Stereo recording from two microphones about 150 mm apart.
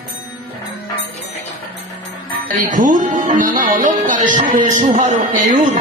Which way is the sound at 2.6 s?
60° right (ahead or behind).